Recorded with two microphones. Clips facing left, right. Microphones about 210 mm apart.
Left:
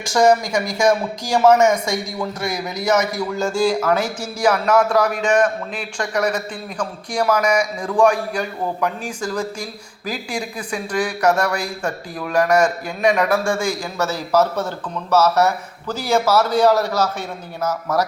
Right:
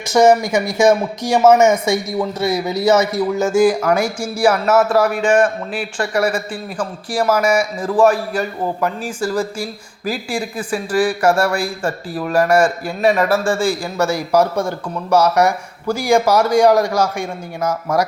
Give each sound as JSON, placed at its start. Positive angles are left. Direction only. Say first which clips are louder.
{"t": 0.1, "sound": "speech", "louder": "right 3 dB", "side_deg": -25}
{"t": 3.5, "sound": "speech", "louder": "right 4 dB", "side_deg": -15}